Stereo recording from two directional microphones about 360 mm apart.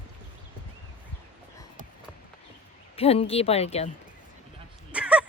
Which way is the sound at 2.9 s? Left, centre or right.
Centre.